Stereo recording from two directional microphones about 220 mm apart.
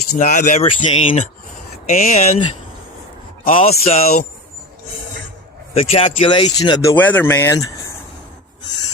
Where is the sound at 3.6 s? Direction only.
25° left (ahead or behind).